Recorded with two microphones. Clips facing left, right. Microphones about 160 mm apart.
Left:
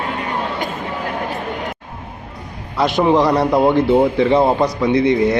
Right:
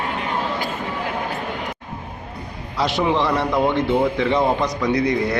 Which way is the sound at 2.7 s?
55° left (ahead or behind).